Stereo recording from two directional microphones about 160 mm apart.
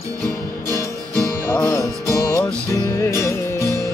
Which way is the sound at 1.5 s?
15° left (ahead or behind).